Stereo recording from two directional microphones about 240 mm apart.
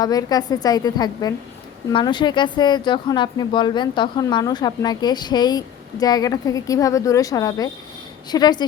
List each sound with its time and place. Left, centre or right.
0.0 s speech: centre